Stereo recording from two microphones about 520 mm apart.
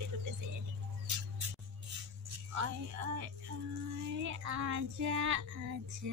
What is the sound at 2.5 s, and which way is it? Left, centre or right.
Music, right.